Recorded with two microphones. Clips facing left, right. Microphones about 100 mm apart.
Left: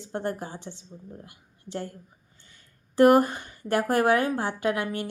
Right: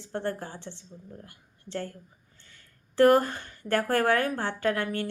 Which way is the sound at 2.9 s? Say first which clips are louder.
Left 2 dB; 15° left (ahead or behind).